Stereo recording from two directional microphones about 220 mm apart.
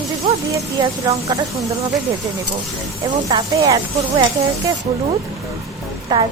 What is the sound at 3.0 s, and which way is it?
Speech, 20° right (ahead or behind).